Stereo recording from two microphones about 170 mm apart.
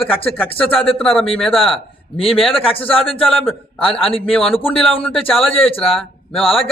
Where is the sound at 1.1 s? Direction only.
35° left (ahead or behind).